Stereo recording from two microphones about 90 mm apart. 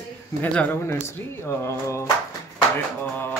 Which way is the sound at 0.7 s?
25° left (ahead or behind).